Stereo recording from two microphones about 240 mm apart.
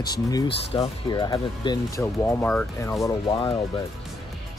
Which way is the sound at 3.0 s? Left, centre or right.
Left.